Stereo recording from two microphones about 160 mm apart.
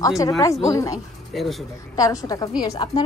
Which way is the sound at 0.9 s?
Centre (ahead or behind).